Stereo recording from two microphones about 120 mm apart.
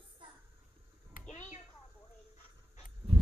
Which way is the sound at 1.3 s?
70° left (ahead or behind).